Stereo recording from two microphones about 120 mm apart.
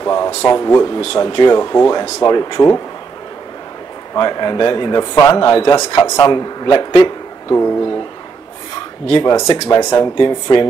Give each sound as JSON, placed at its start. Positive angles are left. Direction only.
{"t": 0.0, "sound": "a sound", "side_deg": 25}
{"t": 0.5, "sound": "speech", "side_deg": 25}
{"t": 1.1, "sound": "a man's voice", "side_deg": 40}
{"t": 4.1, "sound": "a man's voice", "side_deg": 35}
{"t": 6.0, "sound": "speech", "side_deg": 25}
{"t": 6.3, "sound": "a man's voice", "side_deg": 40}
{"t": 7.4, "sound": "speech", "side_deg": 20}
{"t": 9.2, "sound": "a man's voice", "side_deg": 35}
{"t": 10.1, "sound": "speech", "side_deg": 40}